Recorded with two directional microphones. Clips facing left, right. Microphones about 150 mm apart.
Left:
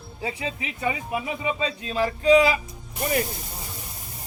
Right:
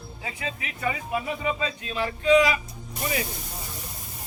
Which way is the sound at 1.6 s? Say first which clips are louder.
Left 4 dB; 35° left (ahead or behind).